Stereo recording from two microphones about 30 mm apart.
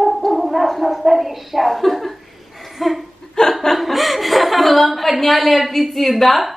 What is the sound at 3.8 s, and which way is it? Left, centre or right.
A woman's voice, centre.